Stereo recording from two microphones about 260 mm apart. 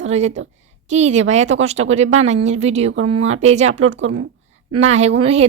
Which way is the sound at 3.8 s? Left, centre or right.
Right.